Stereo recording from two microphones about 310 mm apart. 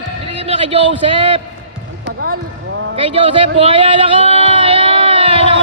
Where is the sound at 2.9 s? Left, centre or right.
Centre.